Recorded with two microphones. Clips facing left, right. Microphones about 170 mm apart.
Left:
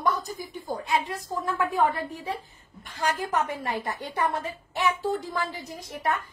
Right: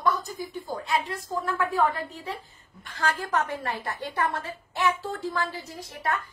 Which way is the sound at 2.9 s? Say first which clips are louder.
Even; 15° left (ahead or behind).